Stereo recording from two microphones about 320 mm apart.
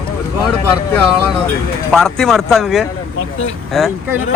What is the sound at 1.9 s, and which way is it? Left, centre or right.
Speech, centre.